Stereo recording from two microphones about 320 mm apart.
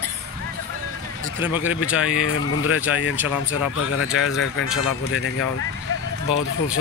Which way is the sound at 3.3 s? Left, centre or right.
Left.